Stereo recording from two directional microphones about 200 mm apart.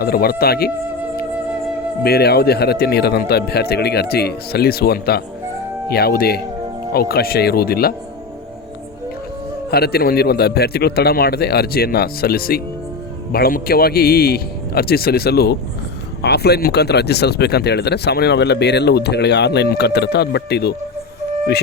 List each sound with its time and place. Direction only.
0.0 s a man's voice: 50° left (ahead or behind)
2.0 s a man's voice: 50° left (ahead or behind)
9.6 s a man's voice: 50° left (ahead or behind)